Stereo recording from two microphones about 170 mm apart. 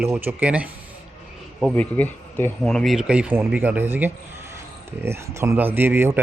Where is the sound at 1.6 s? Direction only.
5° left (ahead or behind).